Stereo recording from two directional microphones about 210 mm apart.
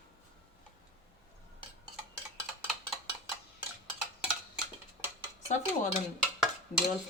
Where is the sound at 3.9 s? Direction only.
5° right (ahead or behind).